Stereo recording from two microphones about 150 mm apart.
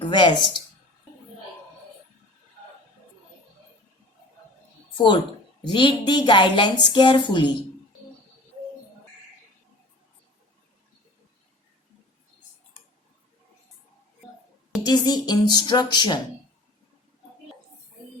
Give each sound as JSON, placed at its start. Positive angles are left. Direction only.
{"t": 0.0, "sound": "speech", "side_deg": 30}
{"t": 4.9, "sound": "a woman's voice", "side_deg": 30}
{"t": 14.8, "sound": "speech", "side_deg": 25}